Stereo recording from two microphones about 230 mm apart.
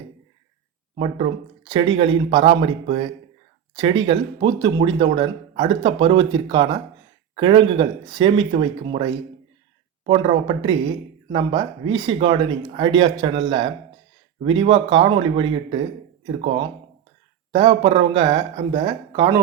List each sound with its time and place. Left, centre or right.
0.9 s speech: right
14.4 s speech: right